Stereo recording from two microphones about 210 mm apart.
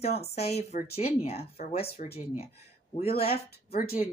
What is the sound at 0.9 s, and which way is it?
Speech, 30° left (ahead or behind).